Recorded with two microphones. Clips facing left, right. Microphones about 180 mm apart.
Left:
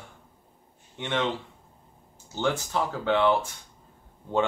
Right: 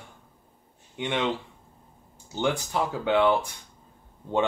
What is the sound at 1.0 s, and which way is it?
Speech, 15° right (ahead or behind).